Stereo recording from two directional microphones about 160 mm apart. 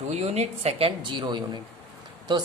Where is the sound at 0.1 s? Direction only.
40° right (ahead or behind).